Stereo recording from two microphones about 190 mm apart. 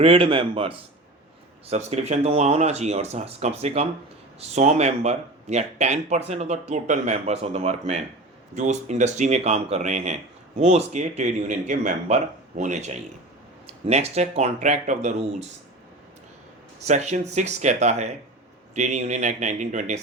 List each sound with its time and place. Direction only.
0.0 s a man's voice: 30° right (ahead or behind)
16.8 s speech: 35° right (ahead or behind)